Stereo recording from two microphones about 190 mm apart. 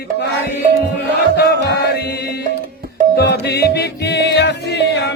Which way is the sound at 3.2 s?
60° left (ahead or behind).